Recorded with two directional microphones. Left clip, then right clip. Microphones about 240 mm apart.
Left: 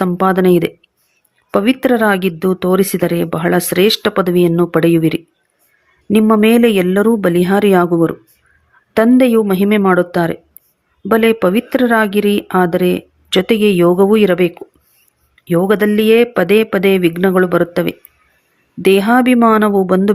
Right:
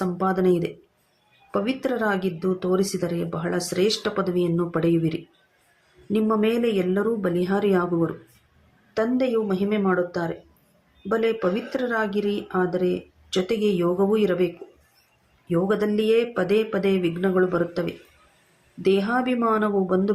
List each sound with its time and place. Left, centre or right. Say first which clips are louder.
0.0 s speech: left 10 dB; left